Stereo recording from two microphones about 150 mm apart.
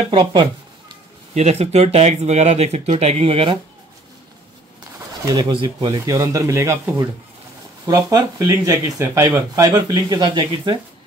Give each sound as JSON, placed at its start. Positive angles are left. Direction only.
{"t": 0.1, "sound": "speech", "side_deg": -35}
{"t": 1.3, "sound": "speech", "side_deg": -45}
{"t": 5.2, "sound": "speech", "side_deg": -30}